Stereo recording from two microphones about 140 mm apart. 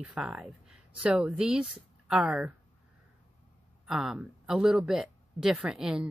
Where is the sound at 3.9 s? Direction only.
5° right (ahead or behind).